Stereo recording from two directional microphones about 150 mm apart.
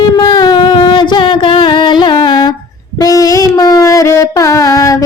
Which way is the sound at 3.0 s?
25° left (ahead or behind).